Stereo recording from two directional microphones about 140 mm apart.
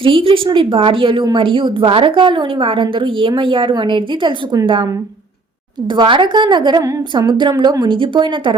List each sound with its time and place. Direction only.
0.0 s a woman's voice: 40° right (ahead or behind)
5.9 s a woman's voice: 35° right (ahead or behind)